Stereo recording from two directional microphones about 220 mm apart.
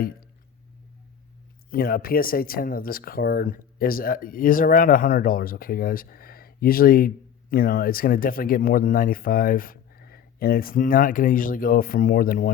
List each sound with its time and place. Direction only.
1.7 s speech: 40° left (ahead or behind)